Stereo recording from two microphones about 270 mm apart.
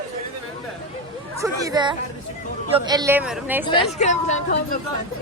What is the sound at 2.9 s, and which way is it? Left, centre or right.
Speech, centre.